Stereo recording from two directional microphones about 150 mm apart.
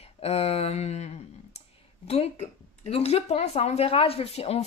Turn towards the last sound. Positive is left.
turn(degrees=40)  # may be behind; listen again after turning